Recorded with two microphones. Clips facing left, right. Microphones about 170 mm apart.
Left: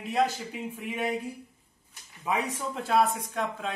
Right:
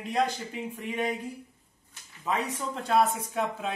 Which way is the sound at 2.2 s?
10° left (ahead or behind).